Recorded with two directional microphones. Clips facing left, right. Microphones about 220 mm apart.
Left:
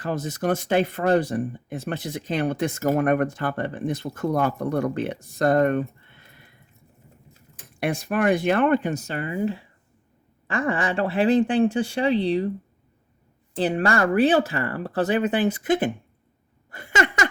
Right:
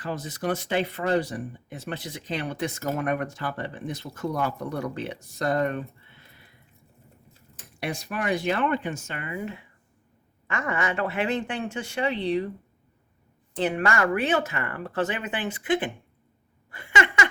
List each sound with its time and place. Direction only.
0.0 s speech: 45° left (ahead or behind)
7.8 s speech: 50° left (ahead or behind); by 12.5 s 30° left (ahead or behind)
13.6 s speech: 35° left (ahead or behind)
16.7 s a sound: 40° left (ahead or behind)